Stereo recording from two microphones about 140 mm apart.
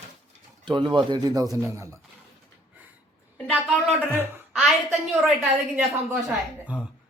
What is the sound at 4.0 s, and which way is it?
Speech, 15° right (ahead or behind).